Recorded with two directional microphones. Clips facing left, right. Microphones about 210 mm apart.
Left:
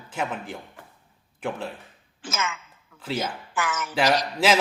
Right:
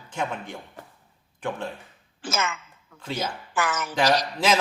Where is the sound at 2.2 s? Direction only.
35° right (ahead or behind).